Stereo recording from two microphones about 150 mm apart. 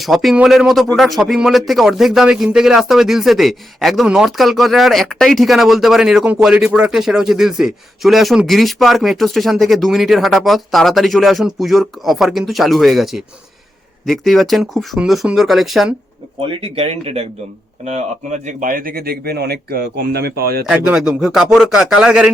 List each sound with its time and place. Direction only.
0.0 s a man's voice: centre (ahead or behind)
16.5 s speech: 40° right (ahead or behind); by 20.7 s 90° right
20.7 s a man's voice: 10° right (ahead or behind)